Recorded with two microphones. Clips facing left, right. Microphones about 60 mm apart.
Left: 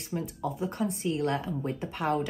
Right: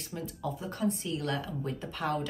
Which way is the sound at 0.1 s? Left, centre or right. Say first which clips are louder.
Left 4 dB; left.